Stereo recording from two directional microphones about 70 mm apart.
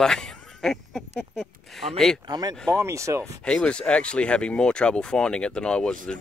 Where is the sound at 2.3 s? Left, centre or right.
Right.